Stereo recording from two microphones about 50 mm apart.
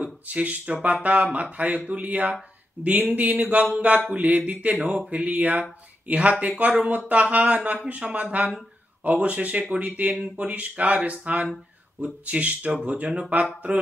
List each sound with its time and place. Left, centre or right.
0.0 s speech: right